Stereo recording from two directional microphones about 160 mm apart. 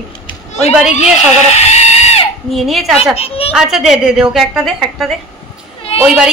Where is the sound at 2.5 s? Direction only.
Centre (ahead or behind).